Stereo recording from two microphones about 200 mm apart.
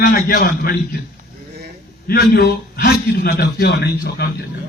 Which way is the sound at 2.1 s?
50° left (ahead or behind).